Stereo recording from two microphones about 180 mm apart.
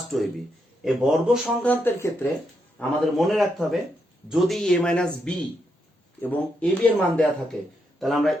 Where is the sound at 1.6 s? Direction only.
10° left (ahead or behind).